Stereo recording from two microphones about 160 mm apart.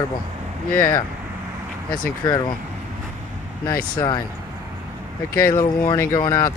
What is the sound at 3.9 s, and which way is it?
Speech, 25° left (ahead or behind).